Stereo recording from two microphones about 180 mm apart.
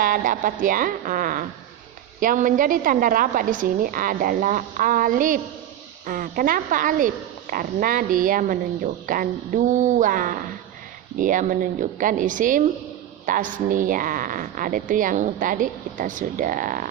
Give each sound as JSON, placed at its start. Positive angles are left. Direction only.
{"t": 0.0, "sound": "a woman's voice", "side_deg": -50}